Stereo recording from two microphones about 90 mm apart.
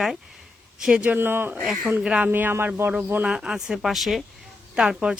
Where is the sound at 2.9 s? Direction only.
15° right (ahead or behind).